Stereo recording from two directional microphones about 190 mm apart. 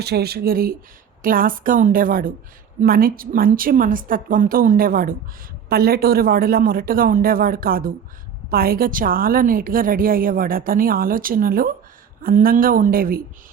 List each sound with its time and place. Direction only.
0.0 s a woman's voice: 55° right (ahead or behind)